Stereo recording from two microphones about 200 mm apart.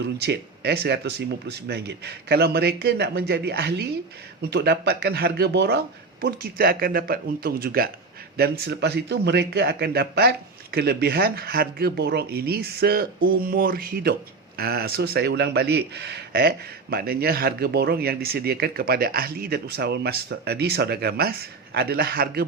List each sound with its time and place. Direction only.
0.0 s speech: 55° right (ahead or behind)